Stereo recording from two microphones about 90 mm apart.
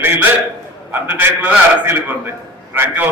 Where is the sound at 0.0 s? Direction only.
25° right (ahead or behind).